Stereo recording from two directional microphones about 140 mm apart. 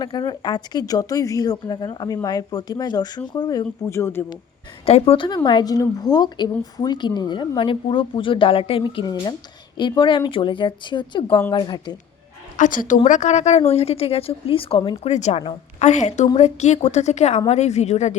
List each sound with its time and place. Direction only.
0.0 s speech: 30° left (ahead or behind); by 4.3 s 15° left (ahead or behind)
4.9 s a woman's voice: 45° left (ahead or behind)
12.5 s a woman's voice: 70° left (ahead or behind)
13.1 s a woman's voice: 55° left (ahead or behind); by 15.1 s 40° left (ahead or behind)
15.1 s a woman's voice: 55° left (ahead or behind)